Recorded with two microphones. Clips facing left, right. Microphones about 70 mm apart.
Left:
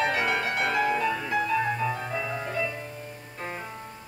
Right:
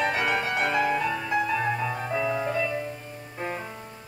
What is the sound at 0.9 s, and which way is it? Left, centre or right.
Music, centre.